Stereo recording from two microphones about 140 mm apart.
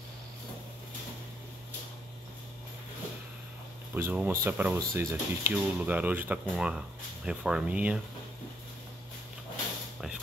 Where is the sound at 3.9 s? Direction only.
15° right (ahead or behind).